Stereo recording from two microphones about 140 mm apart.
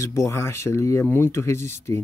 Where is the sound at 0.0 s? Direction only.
20° left (ahead or behind).